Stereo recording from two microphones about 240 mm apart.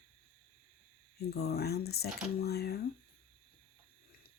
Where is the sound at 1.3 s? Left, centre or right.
Left.